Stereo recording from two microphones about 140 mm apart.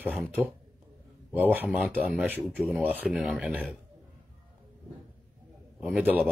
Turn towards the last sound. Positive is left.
turn(degrees=-10)  # may be behind; listen again after turning